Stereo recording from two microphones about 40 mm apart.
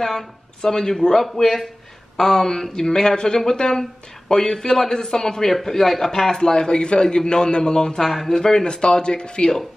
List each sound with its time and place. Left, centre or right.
0.0 s a man's voice: centre
5.5 s a man's voice: centre; by 9.5 s left